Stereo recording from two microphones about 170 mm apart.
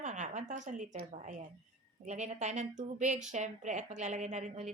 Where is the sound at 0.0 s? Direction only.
45° right (ahead or behind).